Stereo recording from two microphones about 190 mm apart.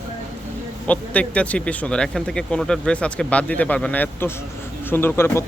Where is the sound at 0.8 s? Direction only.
10° left (ahead or behind).